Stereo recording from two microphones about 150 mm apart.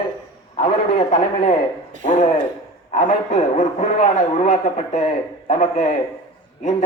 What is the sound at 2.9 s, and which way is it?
Speech, 55° left (ahead or behind).